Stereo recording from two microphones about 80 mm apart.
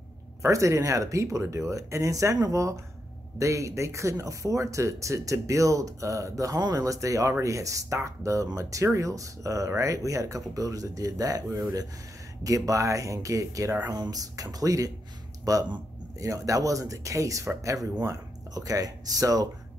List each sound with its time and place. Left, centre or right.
0.4 s speech: right
13.8 s speech: right